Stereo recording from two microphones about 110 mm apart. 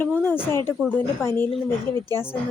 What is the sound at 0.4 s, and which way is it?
Speech, 20° left (ahead or behind).